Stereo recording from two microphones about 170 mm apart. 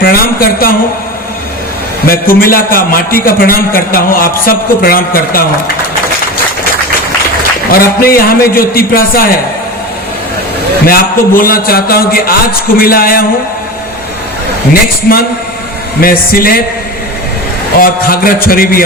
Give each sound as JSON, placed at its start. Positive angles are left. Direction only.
{"t": 0.0, "sound": "a man's voice", "side_deg": 60}
{"t": 2.0, "sound": "a man's voice", "side_deg": 60}
{"t": 7.7, "sound": "a man's voice", "side_deg": 60}
{"t": 10.8, "sound": "a man's voice", "side_deg": 60}
{"t": 16.0, "sound": "a man's voice", "side_deg": 60}
{"t": 17.7, "sound": "a man's voice", "side_deg": 60}